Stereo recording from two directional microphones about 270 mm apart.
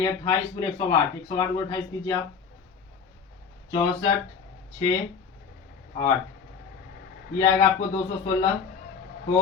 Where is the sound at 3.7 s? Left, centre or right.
Centre.